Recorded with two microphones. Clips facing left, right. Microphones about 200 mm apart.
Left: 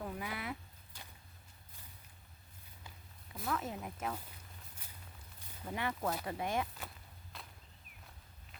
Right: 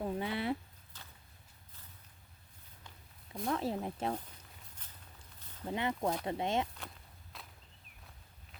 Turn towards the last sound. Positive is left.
turn(degrees=0)  # may be behind; listen again after turning